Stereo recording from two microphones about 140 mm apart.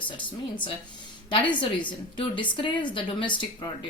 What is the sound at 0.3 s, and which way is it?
A woman's voice, 35° left (ahead or behind).